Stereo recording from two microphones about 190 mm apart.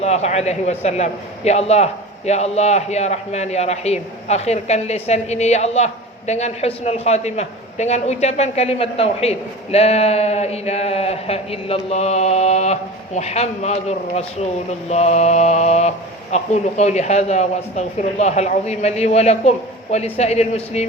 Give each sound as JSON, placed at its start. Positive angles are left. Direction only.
{"t": 0.0, "sound": "a man's voice", "side_deg": 35}